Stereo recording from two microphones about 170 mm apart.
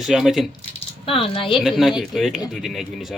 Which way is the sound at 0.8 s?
30° left (ahead or behind).